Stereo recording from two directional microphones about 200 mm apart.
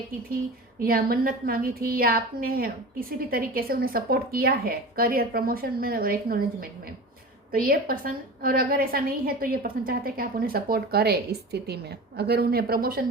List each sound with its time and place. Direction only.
0.8 s a woman's voice: 50° right (ahead or behind)